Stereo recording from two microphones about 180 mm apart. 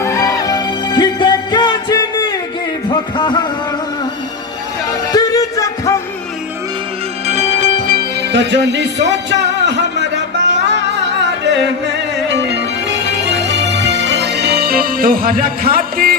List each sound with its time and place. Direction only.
0.0 s music: 15° left (ahead or behind)
5.1 s music: 20° left (ahead or behind)
7.3 s music: 40° right (ahead or behind); by 16.1 s 55° right (ahead or behind)